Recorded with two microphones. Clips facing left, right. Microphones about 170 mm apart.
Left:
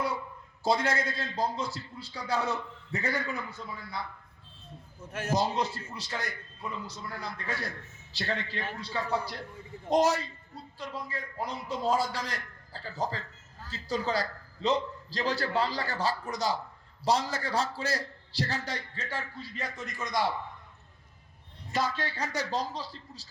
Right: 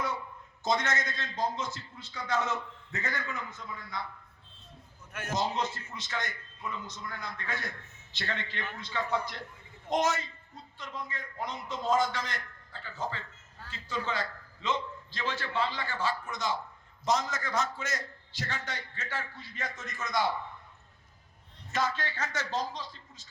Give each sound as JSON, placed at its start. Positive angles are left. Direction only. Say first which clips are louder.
{"t": 0.6, "sound": "a man's voice", "louder": "left 3 dB", "side_deg": 35}
{"t": 5.1, "sound": "a man's voice", "louder": "left 3 dB", "side_deg": 35}
{"t": 21.7, "sound": "a man's voice", "louder": "left 1 dB", "side_deg": 35}